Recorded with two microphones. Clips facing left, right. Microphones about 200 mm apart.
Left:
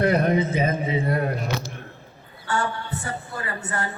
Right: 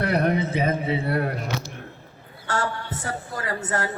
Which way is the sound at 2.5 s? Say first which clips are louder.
Left 1 dB; 90° right.